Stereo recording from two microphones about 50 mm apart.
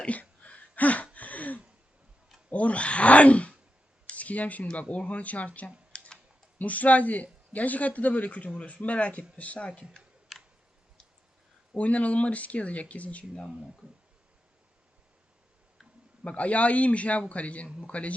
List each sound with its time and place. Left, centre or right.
0.0 s a sound: left
2.5 s speech: left
5.9 s typing: left
6.6 s speech: left
10.3 s tick: centre
11.8 s speech: left
16.2 s speech: left